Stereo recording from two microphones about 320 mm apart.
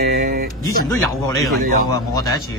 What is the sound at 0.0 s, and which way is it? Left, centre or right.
Music, right.